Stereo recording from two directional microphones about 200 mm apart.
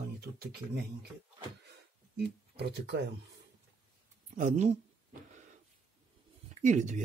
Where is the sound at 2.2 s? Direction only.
55° right (ahead or behind).